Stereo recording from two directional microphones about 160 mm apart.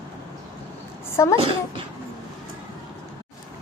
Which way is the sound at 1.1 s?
20° left (ahead or behind).